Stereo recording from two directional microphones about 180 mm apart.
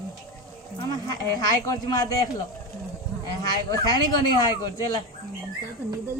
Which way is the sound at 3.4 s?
20° left (ahead or behind).